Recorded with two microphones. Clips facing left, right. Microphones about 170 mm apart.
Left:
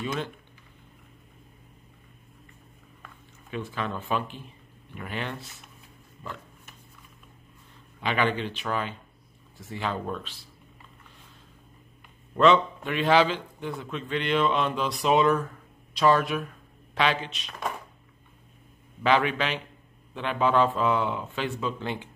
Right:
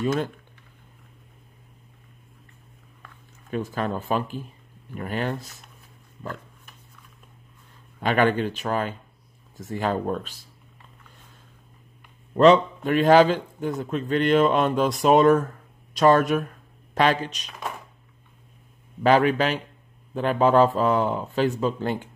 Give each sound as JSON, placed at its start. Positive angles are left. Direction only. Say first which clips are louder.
{"t": 0.0, "sound": "a man's voice", "louder": "right 7 dB", "side_deg": -45}
{"t": 3.4, "sound": "speech", "louder": "right 5 dB", "side_deg": -40}
{"t": 8.0, "sound": "a man's voice", "louder": "right 6 dB", "side_deg": -45}
{"t": 12.8, "sound": "a man's voice", "louder": "right 8 dB", "side_deg": -45}
{"t": 17.5, "sound": "speech", "louder": "left 1 dB", "side_deg": 0}
{"t": 19.0, "sound": "speech", "louder": "right 5 dB", "side_deg": -40}